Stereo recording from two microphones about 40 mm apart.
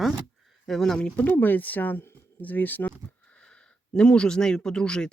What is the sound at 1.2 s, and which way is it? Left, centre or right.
Speech, left.